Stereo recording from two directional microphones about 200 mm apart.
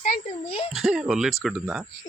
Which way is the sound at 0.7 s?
Centre (ahead or behind).